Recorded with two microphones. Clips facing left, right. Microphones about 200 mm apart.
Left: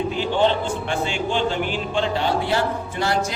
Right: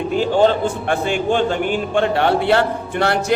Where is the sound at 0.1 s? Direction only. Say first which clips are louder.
Right 8 dB; 45° right (ahead or behind).